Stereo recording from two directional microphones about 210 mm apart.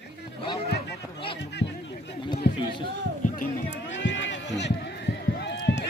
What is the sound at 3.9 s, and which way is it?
Run, 60° left (ahead or behind).